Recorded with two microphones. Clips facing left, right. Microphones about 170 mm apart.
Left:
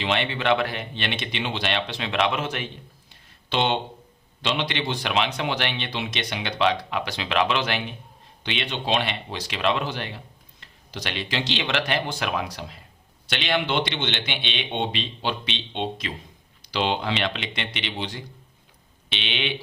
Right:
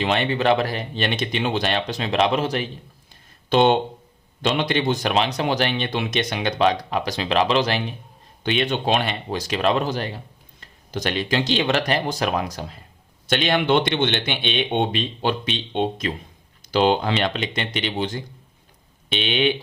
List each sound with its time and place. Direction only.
0.0 s speech: 45° right (ahead or behind)
3.5 s a man's voice: 45° right (ahead or behind)
8.4 s a man's voice: 45° right (ahead or behind)